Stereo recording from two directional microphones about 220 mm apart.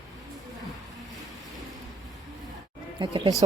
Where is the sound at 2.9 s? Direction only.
20° right (ahead or behind).